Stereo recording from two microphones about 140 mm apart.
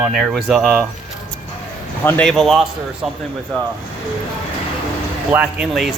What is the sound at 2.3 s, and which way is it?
Speech, centre (ahead or behind).